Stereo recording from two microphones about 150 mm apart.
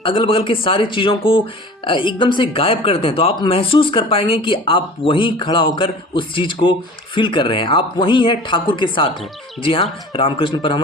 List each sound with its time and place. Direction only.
0.0 s speech: 35° left (ahead or behind)